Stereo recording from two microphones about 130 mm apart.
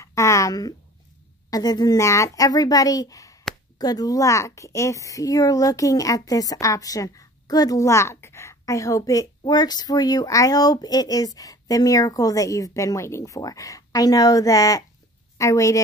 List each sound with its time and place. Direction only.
0.0 s a woman's voice: 25° left (ahead or behind)